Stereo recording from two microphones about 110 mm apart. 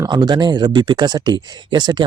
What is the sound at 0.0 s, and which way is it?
Speech, 40° right (ahead or behind).